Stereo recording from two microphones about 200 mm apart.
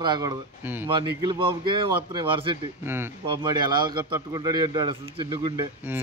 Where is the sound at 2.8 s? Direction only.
10° right (ahead or behind).